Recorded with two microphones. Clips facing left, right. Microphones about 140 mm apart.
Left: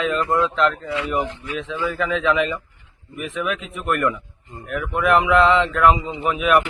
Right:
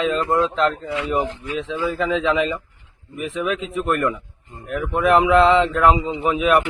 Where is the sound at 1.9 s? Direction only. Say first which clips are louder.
Even; 30° right (ahead or behind).